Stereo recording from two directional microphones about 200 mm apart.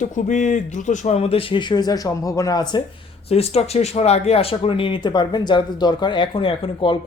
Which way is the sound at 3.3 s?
30° left (ahead or behind).